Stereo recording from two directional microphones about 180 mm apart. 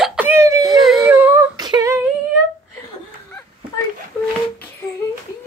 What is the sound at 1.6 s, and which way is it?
Singing, 20° right (ahead or behind).